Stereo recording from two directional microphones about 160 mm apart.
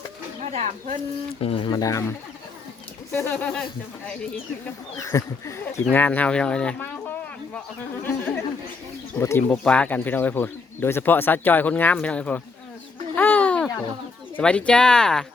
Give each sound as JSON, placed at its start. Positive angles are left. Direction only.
{"t": 0.5, "sound": "speech", "side_deg": -50}
{"t": 1.4, "sound": "speech", "side_deg": 35}
{"t": 4.9, "sound": "speech", "side_deg": 20}
{"t": 8.0, "sound": "speech", "side_deg": 10}
{"t": 13.1, "sound": "a sound", "side_deg": 10}
{"t": 14.3, "sound": "speech", "side_deg": 5}